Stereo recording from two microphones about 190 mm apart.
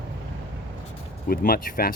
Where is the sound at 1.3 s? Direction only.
45° left (ahead or behind).